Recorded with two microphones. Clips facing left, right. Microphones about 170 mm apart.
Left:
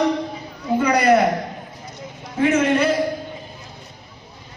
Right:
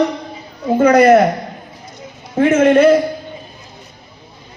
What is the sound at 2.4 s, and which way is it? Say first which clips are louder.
Speech: right 7 dB; 50° right (ahead or behind).